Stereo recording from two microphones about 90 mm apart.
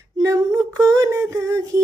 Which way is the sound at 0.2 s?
40° right (ahead or behind).